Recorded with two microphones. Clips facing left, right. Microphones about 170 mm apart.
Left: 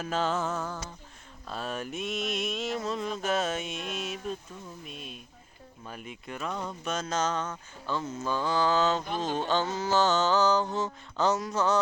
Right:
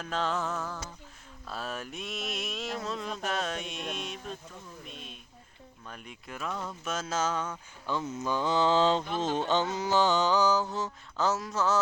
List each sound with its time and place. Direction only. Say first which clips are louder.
0.0 s mantra: left 2 dB; 5° left (ahead or behind)
4.9 s a sound: left 3 dB; 5° left (ahead or behind)
5.9 s mantra: left 4 dB; 5° left (ahead or behind)